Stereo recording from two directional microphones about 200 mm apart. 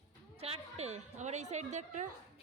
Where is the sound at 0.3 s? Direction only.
30° right (ahead or behind).